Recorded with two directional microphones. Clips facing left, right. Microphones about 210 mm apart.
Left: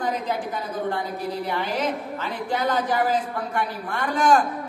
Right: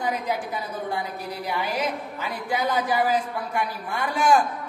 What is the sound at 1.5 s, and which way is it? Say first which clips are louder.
A woman's voice: right 1 dB; 10° right (ahead or behind).